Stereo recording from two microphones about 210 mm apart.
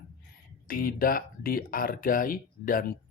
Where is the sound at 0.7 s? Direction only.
45° left (ahead or behind).